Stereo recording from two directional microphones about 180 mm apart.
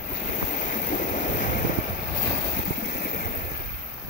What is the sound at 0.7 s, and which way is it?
Waves, 45° left (ahead or behind).